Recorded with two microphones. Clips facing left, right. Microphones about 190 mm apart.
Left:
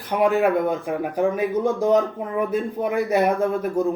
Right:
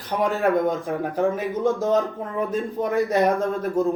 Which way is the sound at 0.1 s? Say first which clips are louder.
Left 2 dB; 15° left (ahead or behind).